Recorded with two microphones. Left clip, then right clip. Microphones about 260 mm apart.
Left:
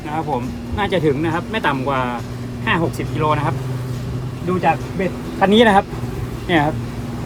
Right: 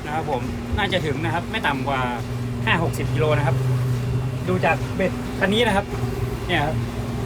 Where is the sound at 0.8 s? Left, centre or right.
Left.